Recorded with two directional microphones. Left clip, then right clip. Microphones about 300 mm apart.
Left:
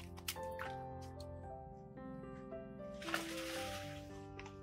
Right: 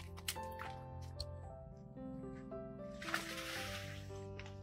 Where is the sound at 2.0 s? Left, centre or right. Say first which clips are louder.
Right 2 dB; centre.